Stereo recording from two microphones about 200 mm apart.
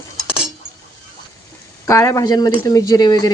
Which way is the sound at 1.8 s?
15° left (ahead or behind).